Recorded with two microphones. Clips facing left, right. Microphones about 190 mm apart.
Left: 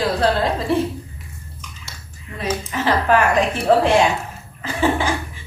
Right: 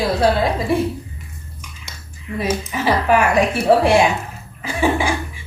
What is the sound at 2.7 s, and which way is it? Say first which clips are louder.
A woman's voice: even; 10° right (ahead or behind).